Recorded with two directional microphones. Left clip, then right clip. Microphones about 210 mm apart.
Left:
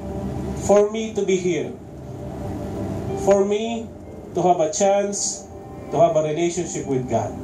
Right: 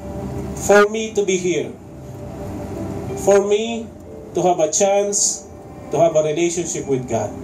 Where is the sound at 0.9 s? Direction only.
45° right (ahead or behind).